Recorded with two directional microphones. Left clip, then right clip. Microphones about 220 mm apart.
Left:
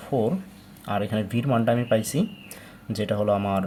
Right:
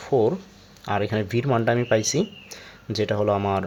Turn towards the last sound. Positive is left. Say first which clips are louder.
# right 1 dB
turn(degrees=-30)  # may be behind; listen again after turning